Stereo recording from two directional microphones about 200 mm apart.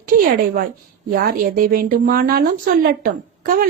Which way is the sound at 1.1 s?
45° right (ahead or behind).